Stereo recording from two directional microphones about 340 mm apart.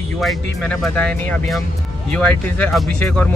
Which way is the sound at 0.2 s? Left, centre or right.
Centre.